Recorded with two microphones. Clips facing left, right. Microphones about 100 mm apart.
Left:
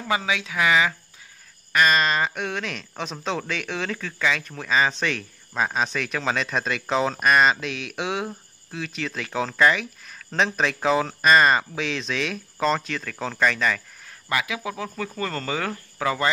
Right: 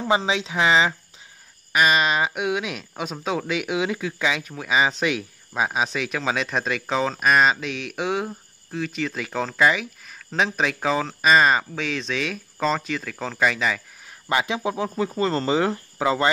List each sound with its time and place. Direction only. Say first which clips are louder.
0.0 s speech: right 3 dB; 25° right (ahead or behind)
1.7 s speech: right 1 dB; 10° right (ahead or behind)
14.3 s speech: right 4 dB; 25° right (ahead or behind)